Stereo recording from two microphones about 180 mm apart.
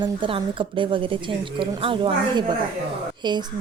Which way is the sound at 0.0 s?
30° right (ahead or behind).